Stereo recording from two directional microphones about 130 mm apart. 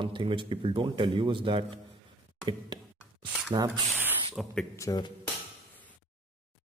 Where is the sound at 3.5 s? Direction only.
30° right (ahead or behind).